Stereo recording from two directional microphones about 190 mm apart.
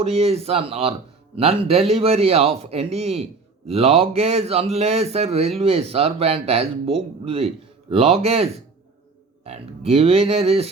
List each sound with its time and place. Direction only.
0.0 s speech: 35° right (ahead or behind)